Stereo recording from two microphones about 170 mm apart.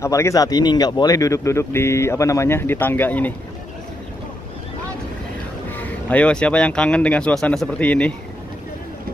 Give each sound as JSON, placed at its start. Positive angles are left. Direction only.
{"t": 0.0, "sound": "speech", "side_deg": 20}
{"t": 6.0, "sound": "speech", "side_deg": 5}